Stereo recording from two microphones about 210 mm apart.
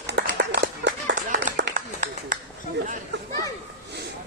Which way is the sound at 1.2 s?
35° right (ahead or behind).